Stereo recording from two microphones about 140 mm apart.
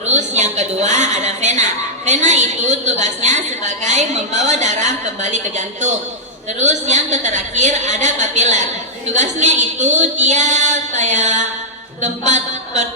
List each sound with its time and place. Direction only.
0.0 s a woman's voice: 55° right (ahead or behind)